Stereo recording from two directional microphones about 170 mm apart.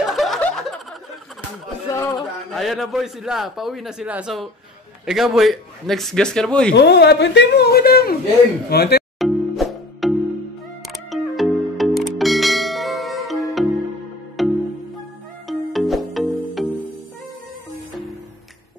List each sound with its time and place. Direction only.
0.1 s snicker: centre (ahead or behind)
1.9 s a sound: 20° left (ahead or behind)
2.5 s a man's voice: centre (ahead or behind)
6.7 s speech: 85° left; by 9.0 s 65° left (ahead or behind)
9.2 s music: centre (ahead or behind)